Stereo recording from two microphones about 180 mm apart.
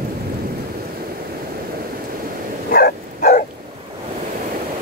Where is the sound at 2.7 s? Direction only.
55° left (ahead or behind).